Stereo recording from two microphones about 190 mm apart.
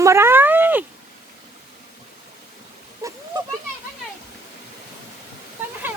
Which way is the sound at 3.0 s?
20° right (ahead or behind).